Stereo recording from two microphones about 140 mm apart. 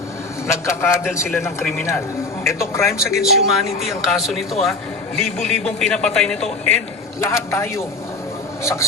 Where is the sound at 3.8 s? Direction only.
Centre (ahead or behind).